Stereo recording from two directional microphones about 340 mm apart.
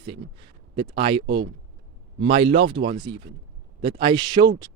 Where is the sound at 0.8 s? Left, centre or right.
Centre.